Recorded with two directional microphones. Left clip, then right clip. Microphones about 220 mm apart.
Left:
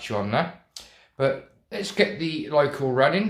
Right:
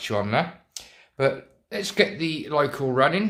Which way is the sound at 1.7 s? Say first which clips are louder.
Right 1 dB; 25° right (ahead or behind).